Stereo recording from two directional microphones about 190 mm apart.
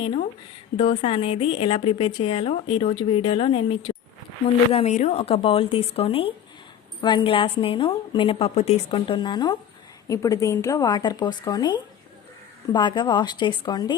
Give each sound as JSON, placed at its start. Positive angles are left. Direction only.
{"t": 0.9, "sound": "a woman's voice", "side_deg": 30}